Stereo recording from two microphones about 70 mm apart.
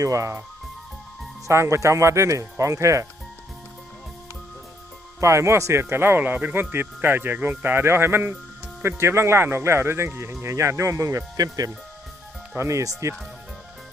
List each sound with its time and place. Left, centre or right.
0.0 s speech: right
1.5 s speech: right
5.2 s speech: right
11.3 s speech: right
12.5 s speech: right